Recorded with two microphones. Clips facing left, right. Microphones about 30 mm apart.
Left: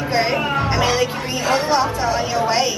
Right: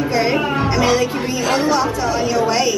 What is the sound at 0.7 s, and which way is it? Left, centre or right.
Music, centre.